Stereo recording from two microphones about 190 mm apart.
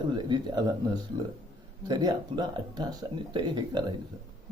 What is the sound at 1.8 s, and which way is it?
Speech, 20° right (ahead or behind).